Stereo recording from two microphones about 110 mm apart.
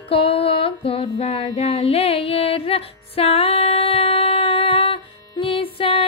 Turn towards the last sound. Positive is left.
turn(degrees=55)  # may be behind; listen again after turning